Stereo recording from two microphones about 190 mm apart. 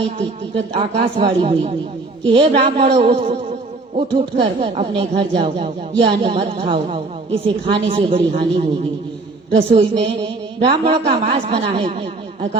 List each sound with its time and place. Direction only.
0.2 s speech: 30° right (ahead or behind)